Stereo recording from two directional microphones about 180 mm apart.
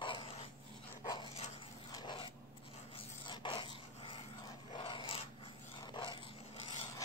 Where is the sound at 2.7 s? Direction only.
30° left (ahead or behind).